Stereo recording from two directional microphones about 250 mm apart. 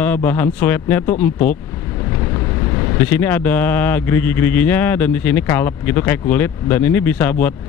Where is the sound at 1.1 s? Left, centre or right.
Left.